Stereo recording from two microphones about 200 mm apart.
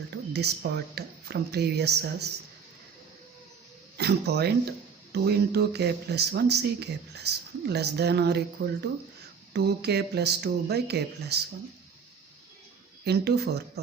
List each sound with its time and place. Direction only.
0.3 s speech: 55° right (ahead or behind)
3.9 s speech: 55° right (ahead or behind)
13.1 s speech: 55° right (ahead or behind)